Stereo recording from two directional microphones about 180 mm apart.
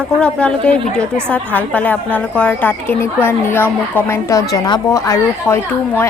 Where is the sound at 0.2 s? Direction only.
5° left (ahead or behind).